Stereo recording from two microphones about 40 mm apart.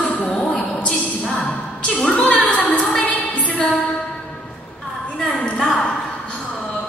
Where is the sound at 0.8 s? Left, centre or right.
Centre.